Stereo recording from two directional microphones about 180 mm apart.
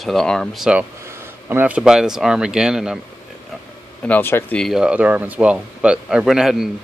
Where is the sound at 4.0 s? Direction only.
10° left (ahead or behind).